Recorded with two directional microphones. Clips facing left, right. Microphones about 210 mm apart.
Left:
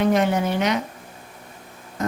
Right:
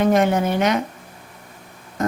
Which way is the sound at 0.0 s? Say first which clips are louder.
Right 2 dB; 50° right (ahead or behind).